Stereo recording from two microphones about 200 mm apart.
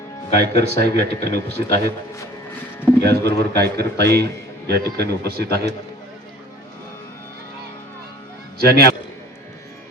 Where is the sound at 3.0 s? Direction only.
55° right (ahead or behind).